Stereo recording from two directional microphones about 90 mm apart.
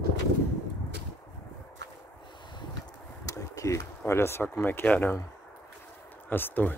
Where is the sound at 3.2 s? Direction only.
40° left (ahead or behind); by 5.1 s 20° left (ahead or behind).